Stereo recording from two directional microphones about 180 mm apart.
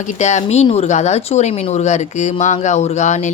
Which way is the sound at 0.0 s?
40° left (ahead or behind).